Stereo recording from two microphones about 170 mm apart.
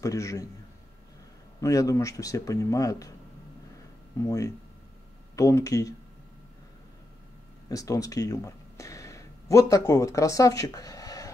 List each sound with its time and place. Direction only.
0.0 s speech: 20° left (ahead or behind)
1.6 s speech: 20° left (ahead or behind)
5.3 s speech: 20° left (ahead or behind)
7.7 s speech: 20° left (ahead or behind)